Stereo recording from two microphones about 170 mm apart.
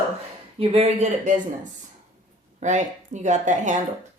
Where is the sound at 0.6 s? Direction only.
35° right (ahead or behind).